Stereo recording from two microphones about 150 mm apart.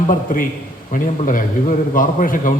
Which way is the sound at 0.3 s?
65° left (ahead or behind).